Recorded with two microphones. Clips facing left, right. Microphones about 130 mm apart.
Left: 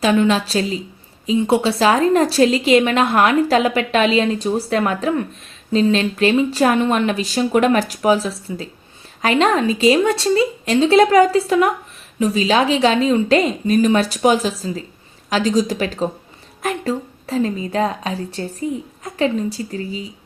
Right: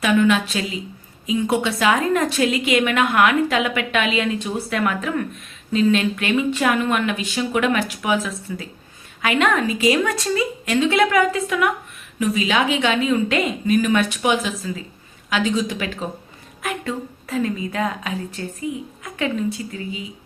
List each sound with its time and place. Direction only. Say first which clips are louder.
0.0 s a woman's voice: left 2 dB; 30° left (ahead or behind)